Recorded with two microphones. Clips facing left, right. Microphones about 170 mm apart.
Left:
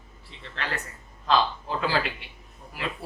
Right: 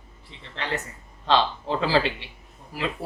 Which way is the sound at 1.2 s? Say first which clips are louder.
Right 2 dB; 30° right (ahead or behind).